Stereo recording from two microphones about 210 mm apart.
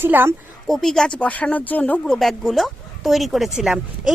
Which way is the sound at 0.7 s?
Centre (ahead or behind).